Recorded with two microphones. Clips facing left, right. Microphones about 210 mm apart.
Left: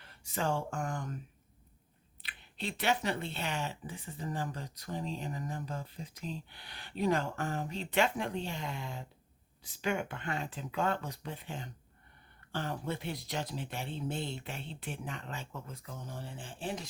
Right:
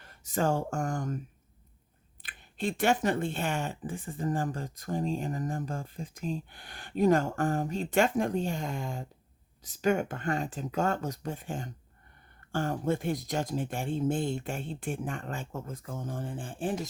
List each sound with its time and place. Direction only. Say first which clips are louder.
0.0 s speech: right 6 dB; 45° right (ahead or behind)
2.2 s speech: right 7 dB; 45° right (ahead or behind)